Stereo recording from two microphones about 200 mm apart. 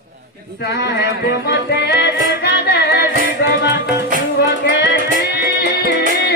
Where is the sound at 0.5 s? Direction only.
55° left (ahead or behind).